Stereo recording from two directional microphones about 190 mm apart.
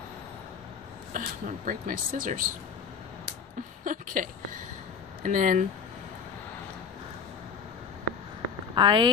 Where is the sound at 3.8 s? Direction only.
45° right (ahead or behind).